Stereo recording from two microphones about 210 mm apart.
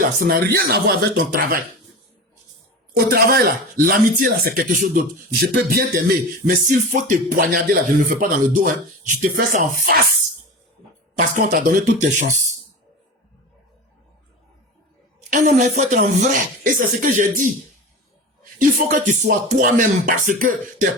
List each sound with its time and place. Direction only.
0.0 s speech: 40° right (ahead or behind)
3.1 s speech: 45° right (ahead or behind)
11.2 s speech: 40° right (ahead or behind)
15.3 s speech: 35° right (ahead or behind)
18.9 s speech: 35° right (ahead or behind)